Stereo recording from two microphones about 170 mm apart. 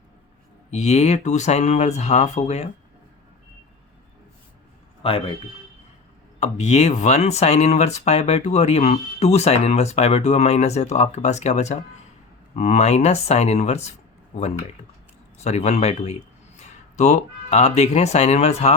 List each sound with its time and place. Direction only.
0.7 s speech: 40° left (ahead or behind)
5.0 s speech: 30° left (ahead or behind)
6.4 s speech: 40° left (ahead or behind)